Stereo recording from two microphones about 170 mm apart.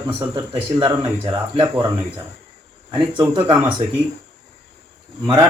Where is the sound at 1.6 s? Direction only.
20° right (ahead or behind).